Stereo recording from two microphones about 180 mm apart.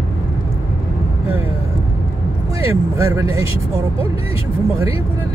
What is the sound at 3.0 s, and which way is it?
Speech, 15° right (ahead or behind).